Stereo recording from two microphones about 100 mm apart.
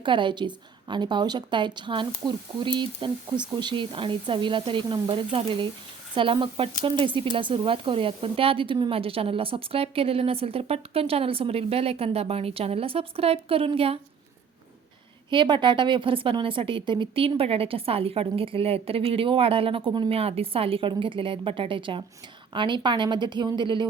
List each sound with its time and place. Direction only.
0.0 s a woman's voice: 55° right (ahead or behind); by 14.0 s 75° right (ahead or behind)
15.3 s a woman's voice: 55° right (ahead or behind)
20.1 s a woman's voice: 80° right; by 23.8 s 55° right (ahead or behind)